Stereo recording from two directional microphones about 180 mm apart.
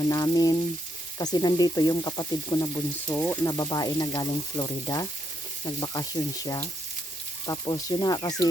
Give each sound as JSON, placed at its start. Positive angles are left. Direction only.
{"t": 0.1, "sound": "speech", "side_deg": 20}
{"t": 3.2, "sound": "sizzle", "side_deg": 10}
{"t": 3.6, "sound": "speech", "side_deg": 25}